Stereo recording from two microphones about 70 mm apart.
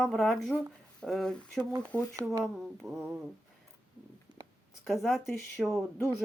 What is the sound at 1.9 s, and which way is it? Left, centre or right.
Speech, centre.